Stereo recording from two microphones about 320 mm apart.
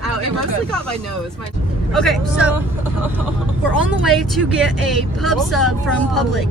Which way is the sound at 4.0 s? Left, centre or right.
Centre.